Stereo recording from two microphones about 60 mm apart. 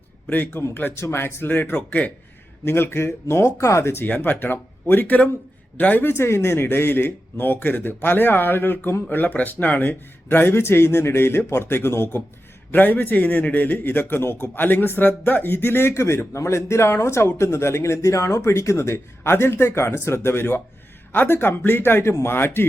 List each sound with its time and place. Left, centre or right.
0.3 s a man's voice: left
1.7 s speech: left
2.6 s speech: left
4.0 s a man's voice: left